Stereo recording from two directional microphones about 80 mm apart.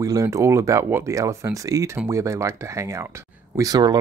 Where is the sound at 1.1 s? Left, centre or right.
Right.